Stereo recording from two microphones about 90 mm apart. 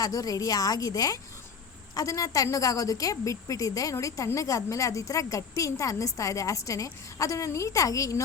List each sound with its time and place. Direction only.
0.0 s a woman's voice: 45° left (ahead or behind)